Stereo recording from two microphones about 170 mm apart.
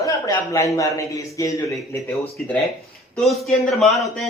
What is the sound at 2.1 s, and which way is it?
A man's voice, centre (ahead or behind).